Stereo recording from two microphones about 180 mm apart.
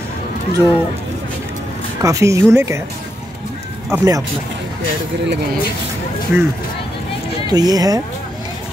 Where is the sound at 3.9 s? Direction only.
20° right (ahead or behind).